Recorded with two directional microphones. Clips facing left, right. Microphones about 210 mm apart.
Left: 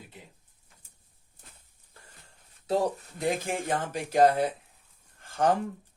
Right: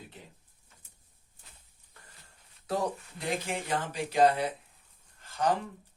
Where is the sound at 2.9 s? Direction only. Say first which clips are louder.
Left 5 dB; 45° left (ahead or behind).